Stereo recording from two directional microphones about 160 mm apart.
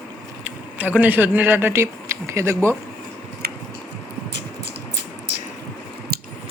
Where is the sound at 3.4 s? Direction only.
75° right (ahead or behind).